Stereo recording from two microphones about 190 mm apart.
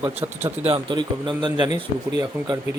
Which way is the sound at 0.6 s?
30° right (ahead or behind).